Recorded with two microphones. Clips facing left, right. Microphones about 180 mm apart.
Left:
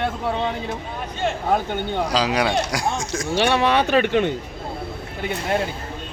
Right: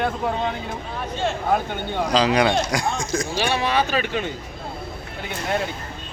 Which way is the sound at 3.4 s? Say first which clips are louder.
Left 5 dB; 65° left (ahead or behind).